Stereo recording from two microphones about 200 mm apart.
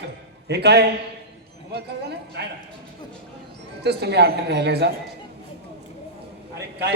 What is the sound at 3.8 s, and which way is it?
A man's voice, 55° right (ahead or behind).